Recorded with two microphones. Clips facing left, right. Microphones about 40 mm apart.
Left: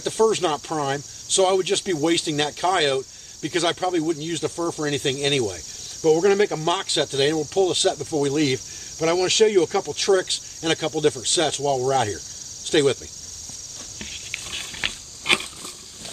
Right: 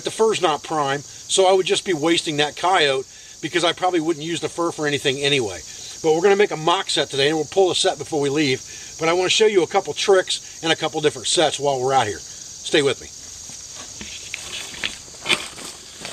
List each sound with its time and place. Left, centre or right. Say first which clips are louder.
0.0 s speech: right 2 dB; right
4.9 s speech: right 2 dB; right